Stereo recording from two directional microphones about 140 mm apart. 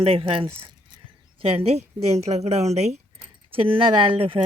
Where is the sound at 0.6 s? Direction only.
35° right (ahead or behind).